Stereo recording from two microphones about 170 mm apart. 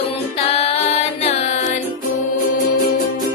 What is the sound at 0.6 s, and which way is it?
Music, 35° left (ahead or behind).